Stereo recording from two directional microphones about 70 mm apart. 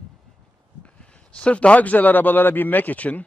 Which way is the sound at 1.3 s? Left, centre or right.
Centre.